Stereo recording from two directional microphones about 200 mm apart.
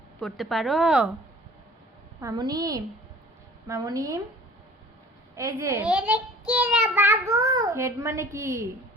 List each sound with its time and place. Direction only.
0.2 s a woman's voice: centre (ahead or behind)
2.2 s a woman's voice: 20° right (ahead or behind)
3.7 s child singing: 15° right (ahead or behind)
5.4 s child singing: 15° right (ahead or behind)
5.8 s child singing: 5° right (ahead or behind)